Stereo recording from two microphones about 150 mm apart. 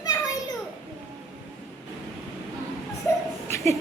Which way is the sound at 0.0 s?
25° left (ahead or behind).